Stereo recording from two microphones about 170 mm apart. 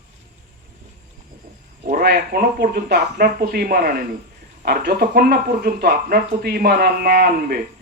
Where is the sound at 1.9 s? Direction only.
60° right (ahead or behind).